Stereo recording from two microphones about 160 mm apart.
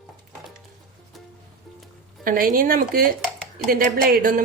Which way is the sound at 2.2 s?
60° right (ahead or behind).